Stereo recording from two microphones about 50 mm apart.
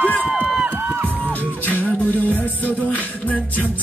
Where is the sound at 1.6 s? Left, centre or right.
Left.